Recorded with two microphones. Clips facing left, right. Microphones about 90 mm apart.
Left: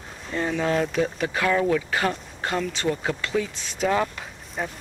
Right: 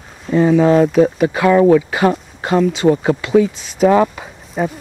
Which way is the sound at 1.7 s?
10° right (ahead or behind).